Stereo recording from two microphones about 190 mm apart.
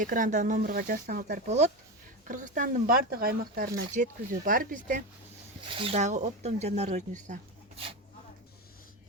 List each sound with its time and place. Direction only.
0.0 s speech: 45° right (ahead or behind)
5.7 s speech: 30° right (ahead or behind)